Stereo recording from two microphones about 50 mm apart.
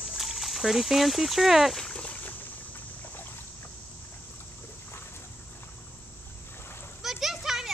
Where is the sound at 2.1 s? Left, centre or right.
Left.